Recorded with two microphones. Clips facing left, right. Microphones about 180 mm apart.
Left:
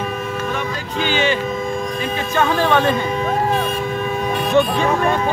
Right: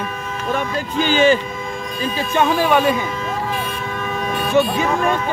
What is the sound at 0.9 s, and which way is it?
Speech, 45° right (ahead or behind).